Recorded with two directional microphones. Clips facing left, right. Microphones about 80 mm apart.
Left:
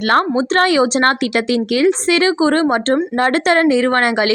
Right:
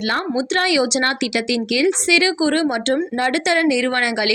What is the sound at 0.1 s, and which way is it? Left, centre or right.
A woman's voice, left.